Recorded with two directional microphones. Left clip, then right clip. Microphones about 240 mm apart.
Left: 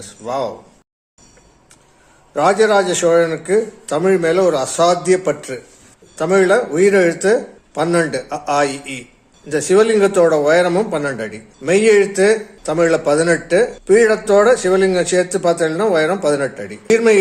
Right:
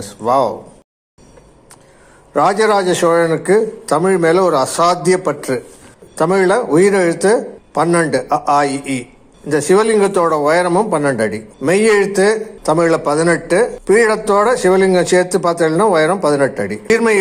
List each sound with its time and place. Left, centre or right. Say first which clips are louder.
0.0 s speech: right 8 dB; centre
2.3 s speech: even; centre